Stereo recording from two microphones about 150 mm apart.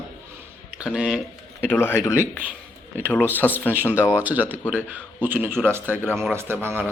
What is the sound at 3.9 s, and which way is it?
Speech, 10° right (ahead or behind).